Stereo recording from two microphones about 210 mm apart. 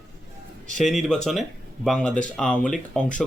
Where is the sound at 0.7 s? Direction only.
Centre (ahead or behind).